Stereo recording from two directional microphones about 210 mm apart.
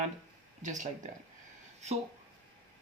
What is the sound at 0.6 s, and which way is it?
Speech, 35° right (ahead or behind).